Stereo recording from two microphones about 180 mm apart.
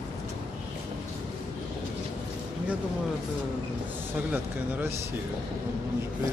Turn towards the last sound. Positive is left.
turn(degrees=-10)  # may be behind; listen again after turning